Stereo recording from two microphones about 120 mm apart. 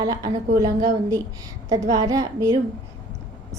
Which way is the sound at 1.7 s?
30° right (ahead or behind).